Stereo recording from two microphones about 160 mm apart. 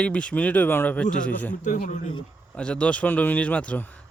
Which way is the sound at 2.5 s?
5° left (ahead or behind).